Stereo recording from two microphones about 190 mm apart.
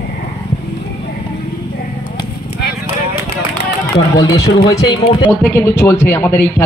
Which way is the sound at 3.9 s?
20° left (ahead or behind).